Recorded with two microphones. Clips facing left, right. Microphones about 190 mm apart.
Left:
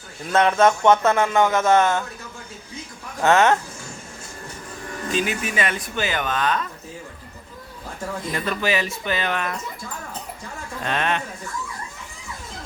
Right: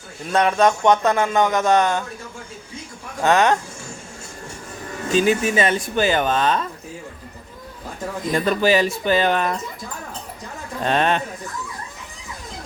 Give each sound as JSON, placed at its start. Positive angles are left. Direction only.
{"t": 0.3, "sound": "a man's voice", "side_deg": -15}
{"t": 3.2, "sound": "a man's voice", "side_deg": -15}
{"t": 5.0, "sound": "speech", "side_deg": -30}
{"t": 8.3, "sound": "speech", "side_deg": -35}
{"t": 10.8, "sound": "speech", "side_deg": -35}